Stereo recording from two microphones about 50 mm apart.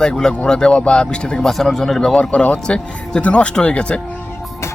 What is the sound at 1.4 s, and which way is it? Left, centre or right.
Speech, centre.